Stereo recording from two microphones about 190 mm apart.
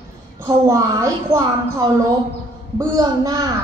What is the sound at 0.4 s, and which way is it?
A woman's voice, 15° right (ahead or behind).